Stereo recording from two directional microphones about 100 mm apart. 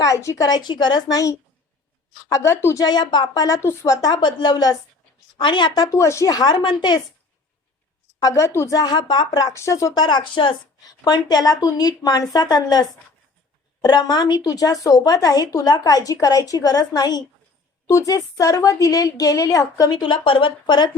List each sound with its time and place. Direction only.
0.0 s a woman's voice: 30° left (ahead or behind)
2.8 s speech: 50° left (ahead or behind)
3.4 s speech: 30° left (ahead or behind); by 7.0 s 50° left (ahead or behind)
8.2 s a woman's voice: 30° left (ahead or behind)
8.7 s speech: 45° left (ahead or behind)
10.8 s speech: 40° left (ahead or behind)
19.9 s speech: 55° left (ahead or behind)